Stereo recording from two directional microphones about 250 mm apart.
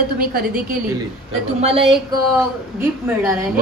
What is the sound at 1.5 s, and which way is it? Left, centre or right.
Speech, right.